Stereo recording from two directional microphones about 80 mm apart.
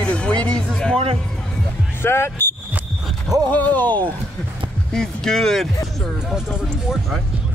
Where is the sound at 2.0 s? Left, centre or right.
Left.